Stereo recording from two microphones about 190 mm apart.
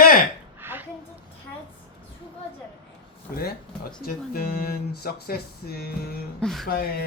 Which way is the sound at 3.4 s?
55° left (ahead or behind).